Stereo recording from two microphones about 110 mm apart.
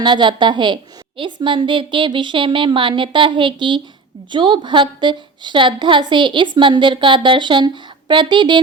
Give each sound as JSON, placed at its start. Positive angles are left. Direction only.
{"t": 0.0, "sound": "a woman's voice", "side_deg": -45}